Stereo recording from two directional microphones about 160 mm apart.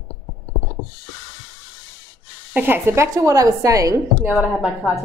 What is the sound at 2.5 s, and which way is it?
A woman's voice, 15° right (ahead or behind).